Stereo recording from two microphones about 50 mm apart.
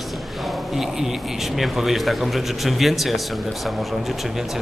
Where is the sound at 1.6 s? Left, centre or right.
Centre.